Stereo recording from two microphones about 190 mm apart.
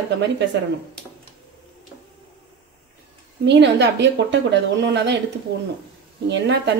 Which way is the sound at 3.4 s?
65° right (ahead or behind).